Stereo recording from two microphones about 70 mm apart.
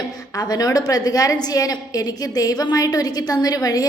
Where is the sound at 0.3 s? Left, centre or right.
Left.